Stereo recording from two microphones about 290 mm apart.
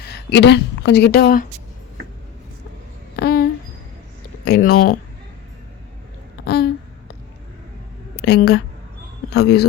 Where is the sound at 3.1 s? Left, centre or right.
Left.